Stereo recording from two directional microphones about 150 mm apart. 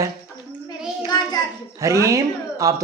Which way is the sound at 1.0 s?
25° left (ahead or behind).